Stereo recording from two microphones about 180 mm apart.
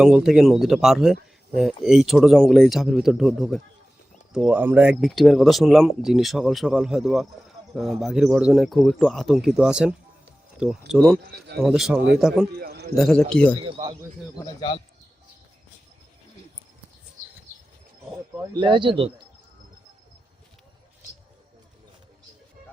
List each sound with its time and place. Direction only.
0.0 s speech: 5° right (ahead or behind)
11.3 s a man's voice: 65° right (ahead or behind)
11.6 s speech: centre (ahead or behind)
12.5 s a sound: 60° right (ahead or behind)
13.0 s speech: 5° left (ahead or behind)
13.7 s speech: 25° right (ahead or behind)
18.5 s speech: 25° right (ahead or behind)